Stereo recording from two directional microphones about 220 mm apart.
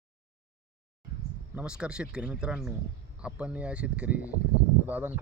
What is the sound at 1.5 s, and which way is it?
Speech, 5° right (ahead or behind).